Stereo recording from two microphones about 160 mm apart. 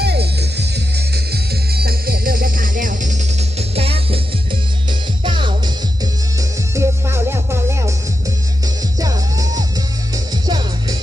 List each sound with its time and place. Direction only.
0.0 s music: 90° right; by 6.1 s 30° right (ahead or behind)
6.7 s music: 15° right (ahead or behind)